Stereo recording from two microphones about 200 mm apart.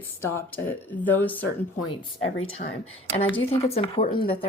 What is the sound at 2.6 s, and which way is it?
Speech, 45° left (ahead or behind).